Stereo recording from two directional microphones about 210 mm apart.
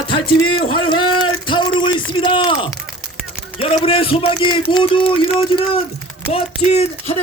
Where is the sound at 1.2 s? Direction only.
20° left (ahead or behind).